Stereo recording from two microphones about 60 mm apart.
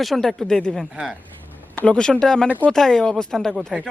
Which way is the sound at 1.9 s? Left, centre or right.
Centre.